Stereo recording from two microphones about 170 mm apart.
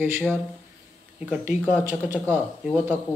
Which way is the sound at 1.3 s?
5° right (ahead or behind).